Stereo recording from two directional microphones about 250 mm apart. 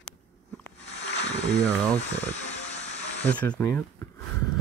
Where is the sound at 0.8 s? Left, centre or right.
Left.